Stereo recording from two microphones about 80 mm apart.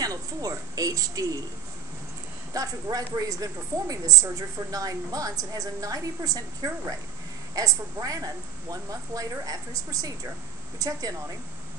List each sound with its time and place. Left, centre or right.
0.0 s a woman's voice: right
2.5 s a woman's voice: right